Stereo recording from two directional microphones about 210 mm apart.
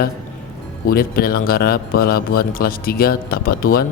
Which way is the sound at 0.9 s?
45° left (ahead or behind).